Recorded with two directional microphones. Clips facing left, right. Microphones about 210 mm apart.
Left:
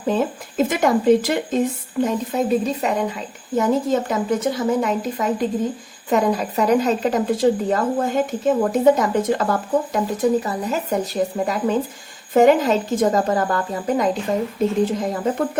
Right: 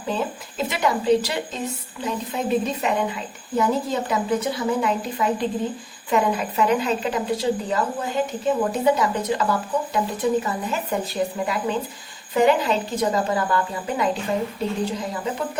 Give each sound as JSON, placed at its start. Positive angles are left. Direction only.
{"t": 0.0, "sound": "speech", "side_deg": 50}